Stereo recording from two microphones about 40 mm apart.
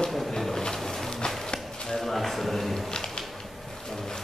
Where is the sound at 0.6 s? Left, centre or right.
Centre.